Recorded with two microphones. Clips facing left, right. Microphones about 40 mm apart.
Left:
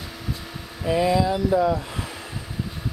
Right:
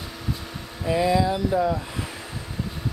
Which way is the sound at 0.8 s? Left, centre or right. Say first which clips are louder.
Left 1 dB; centre.